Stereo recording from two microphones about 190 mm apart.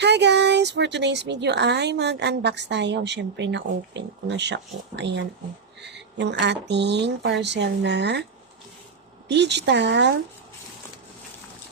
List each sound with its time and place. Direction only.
0.0 s speech: 65° right (ahead or behind)
9.3 s speech: 65° right (ahead or behind)